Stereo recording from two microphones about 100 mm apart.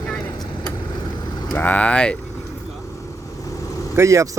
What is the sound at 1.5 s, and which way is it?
Speech, 15° left (ahead or behind).